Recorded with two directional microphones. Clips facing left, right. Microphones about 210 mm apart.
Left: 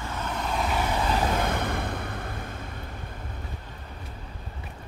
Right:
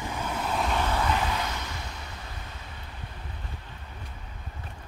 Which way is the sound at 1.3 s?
55° left (ahead or behind).